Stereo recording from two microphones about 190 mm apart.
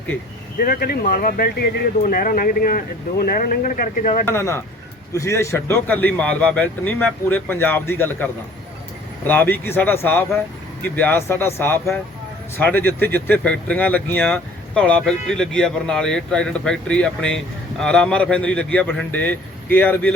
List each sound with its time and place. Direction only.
0.6 s speech: 50° left (ahead or behind)
4.3 s speech: 15° left (ahead or behind)